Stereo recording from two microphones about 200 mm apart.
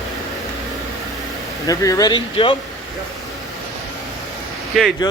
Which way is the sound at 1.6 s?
15° left (ahead or behind).